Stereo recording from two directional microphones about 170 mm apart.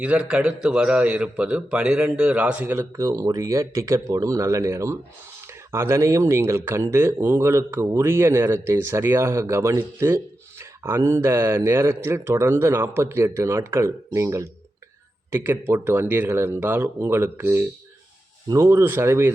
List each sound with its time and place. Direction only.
0.0 s a man's voice: 5° right (ahead or behind)